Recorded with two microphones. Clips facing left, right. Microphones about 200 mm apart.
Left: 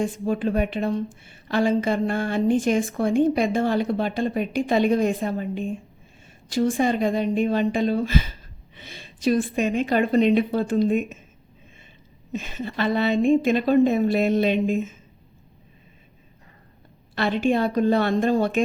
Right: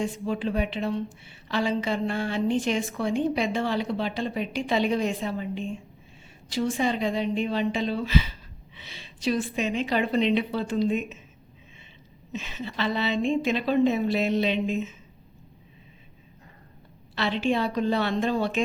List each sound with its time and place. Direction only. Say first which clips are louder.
0.0 s a woman's voice: left 4 dB; 50° left (ahead or behind)
12.3 s a woman's voice: left 4 dB; 50° left (ahead or behind)
17.2 s a woman's voice: left 4 dB; 50° left (ahead or behind)